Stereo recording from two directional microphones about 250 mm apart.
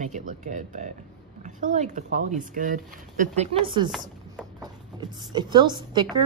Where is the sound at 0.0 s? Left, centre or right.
Right.